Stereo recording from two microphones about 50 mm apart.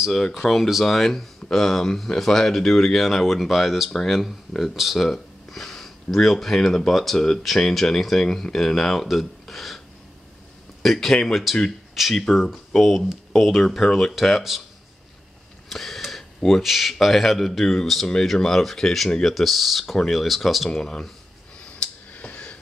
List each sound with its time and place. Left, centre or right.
0.1 s speech: centre
10.8 s speech: centre
11.9 s speech: centre
15.7 s speech: centre
19.3 s speech: centre
21.6 s a sound: left